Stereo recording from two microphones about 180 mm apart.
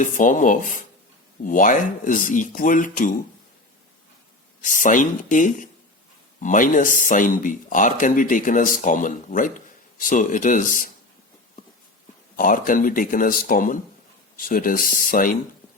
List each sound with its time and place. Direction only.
0.0 s speech: 45° left (ahead or behind)
4.6 s speech: 45° left (ahead or behind)
12.4 s speech: 50° left (ahead or behind)